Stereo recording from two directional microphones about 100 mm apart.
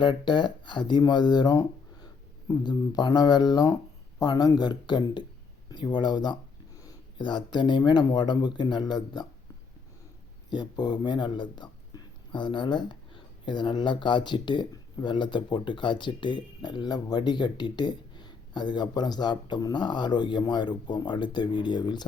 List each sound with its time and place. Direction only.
0.0 s speech: 50° left (ahead or behind)
10.5 s speech: 45° left (ahead or behind)